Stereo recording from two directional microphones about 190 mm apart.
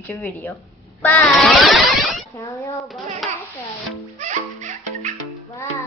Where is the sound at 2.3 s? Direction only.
10° left (ahead or behind).